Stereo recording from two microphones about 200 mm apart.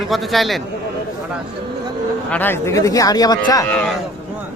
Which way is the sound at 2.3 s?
10° left (ahead or behind).